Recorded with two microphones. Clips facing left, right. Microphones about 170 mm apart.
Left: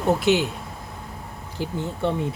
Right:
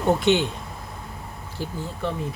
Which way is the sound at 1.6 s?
15° left (ahead or behind).